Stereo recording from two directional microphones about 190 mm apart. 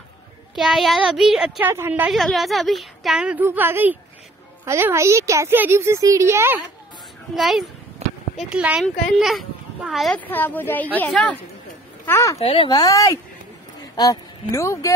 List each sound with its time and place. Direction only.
0.6 s a woman's voice: centre (ahead or behind)
7.3 s a woman's voice: centre (ahead or behind)
8.0 s a sound: 35° right (ahead or behind)
8.4 s a woman's voice: 5° right (ahead or behind); by 12.4 s 15° left (ahead or behind)
12.4 s speech: 30° left (ahead or behind)
14.5 s speech: 15° left (ahead or behind)